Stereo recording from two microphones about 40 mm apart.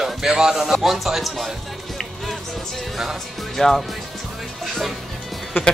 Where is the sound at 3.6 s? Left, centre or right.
Centre.